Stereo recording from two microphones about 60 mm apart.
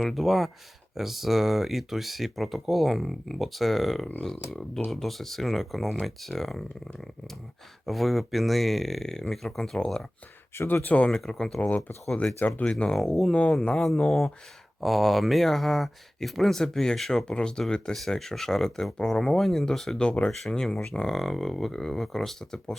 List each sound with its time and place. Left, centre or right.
0.0 s speech: centre
7.9 s speech: centre
10.8 s speech: left
11.1 s speech: centre
12.1 s speech: left
12.9 s speech: centre